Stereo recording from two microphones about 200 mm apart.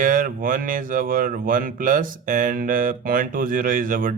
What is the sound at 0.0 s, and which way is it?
Speech, 40° right (ahead or behind).